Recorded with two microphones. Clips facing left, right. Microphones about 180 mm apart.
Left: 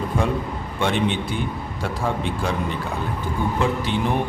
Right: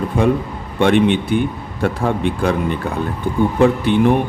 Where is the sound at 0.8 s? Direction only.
60° right (ahead or behind).